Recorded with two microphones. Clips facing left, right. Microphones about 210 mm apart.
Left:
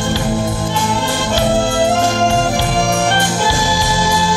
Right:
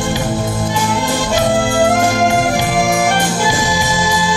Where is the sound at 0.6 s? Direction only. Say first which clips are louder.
Right 1 dB; 10° right (ahead or behind).